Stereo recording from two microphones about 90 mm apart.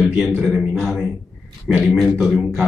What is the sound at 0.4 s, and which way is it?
Speech, 5° right (ahead or behind).